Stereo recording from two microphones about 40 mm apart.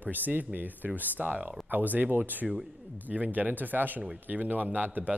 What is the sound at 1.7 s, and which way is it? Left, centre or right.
Speech, right.